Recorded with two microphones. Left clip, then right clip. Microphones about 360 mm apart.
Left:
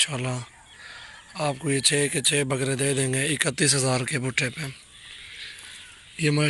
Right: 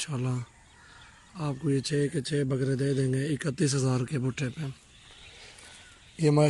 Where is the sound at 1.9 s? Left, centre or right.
Left.